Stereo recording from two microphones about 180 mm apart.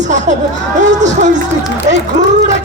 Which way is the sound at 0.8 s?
40° right (ahead or behind).